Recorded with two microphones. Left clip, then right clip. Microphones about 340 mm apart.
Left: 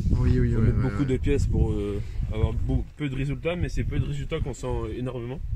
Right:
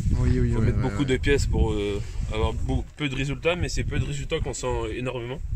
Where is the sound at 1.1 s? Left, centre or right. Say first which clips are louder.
Right 6 dB; right.